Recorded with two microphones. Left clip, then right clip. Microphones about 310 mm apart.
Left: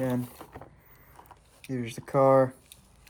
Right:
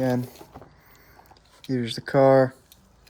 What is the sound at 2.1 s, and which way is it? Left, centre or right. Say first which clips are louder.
Speech: right 4 dB; centre.